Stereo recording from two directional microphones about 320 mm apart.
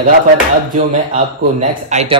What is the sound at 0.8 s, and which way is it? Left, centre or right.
Speech, right.